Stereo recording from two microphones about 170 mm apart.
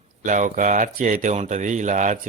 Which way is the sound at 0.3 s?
50° right (ahead or behind).